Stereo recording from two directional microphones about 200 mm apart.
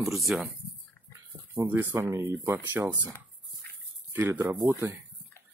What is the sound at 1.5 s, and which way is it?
Speech, 15° right (ahead or behind).